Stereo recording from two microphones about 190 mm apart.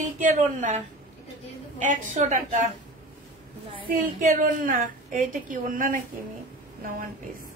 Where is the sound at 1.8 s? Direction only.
40° right (ahead or behind).